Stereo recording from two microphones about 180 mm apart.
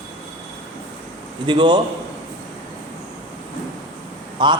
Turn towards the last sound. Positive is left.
turn(degrees=-25)  # may be behind; listen again after turning